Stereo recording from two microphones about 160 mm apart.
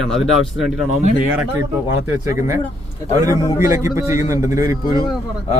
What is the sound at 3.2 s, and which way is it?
A man's voice, 20° right (ahead or behind).